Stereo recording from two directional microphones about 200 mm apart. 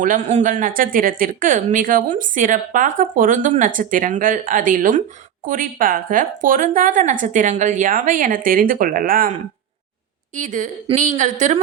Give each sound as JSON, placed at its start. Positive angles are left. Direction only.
{"t": 0.0, "sound": "speech", "side_deg": -35}
{"t": 10.3, "sound": "speech", "side_deg": -40}